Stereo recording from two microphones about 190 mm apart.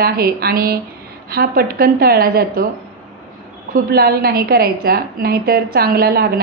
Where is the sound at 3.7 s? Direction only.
55° right (ahead or behind).